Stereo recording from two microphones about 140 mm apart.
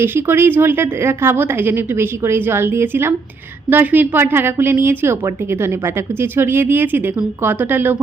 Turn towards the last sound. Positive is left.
turn(degrees=-15)  # may be behind; listen again after turning